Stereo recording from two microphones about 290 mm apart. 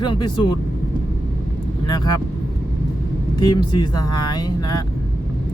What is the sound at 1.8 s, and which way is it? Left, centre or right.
Speech, centre.